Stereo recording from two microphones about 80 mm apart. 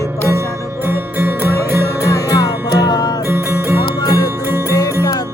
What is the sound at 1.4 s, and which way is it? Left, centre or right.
Music, left.